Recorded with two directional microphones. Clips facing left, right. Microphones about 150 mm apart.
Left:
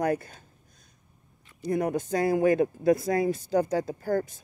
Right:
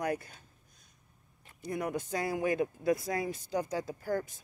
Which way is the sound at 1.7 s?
40° left (ahead or behind).